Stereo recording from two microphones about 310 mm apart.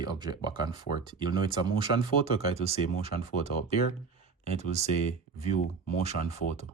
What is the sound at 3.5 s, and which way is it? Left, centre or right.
Speech, left.